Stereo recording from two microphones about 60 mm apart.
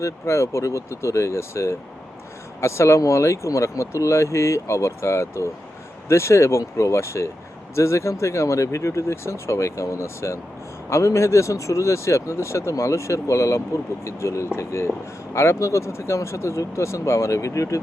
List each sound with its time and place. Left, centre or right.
0.0 s speech: left